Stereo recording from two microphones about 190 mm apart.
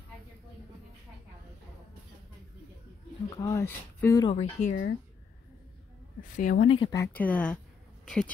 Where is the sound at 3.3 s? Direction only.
15° left (ahead or behind).